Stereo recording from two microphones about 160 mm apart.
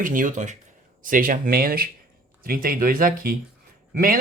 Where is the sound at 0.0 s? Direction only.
55° right (ahead or behind).